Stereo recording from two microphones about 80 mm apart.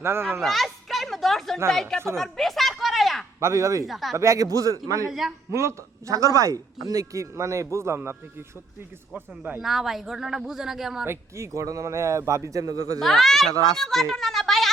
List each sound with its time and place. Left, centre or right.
0.0 s speech: right
0.4 s a sound: centre
1.7 s speech: centre
2.1 s a sound: centre
3.4 s speech: right
3.8 s speech: centre
4.1 s speech: right
9.6 s speech: centre
11.0 s speech: right
13.0 s speech: centre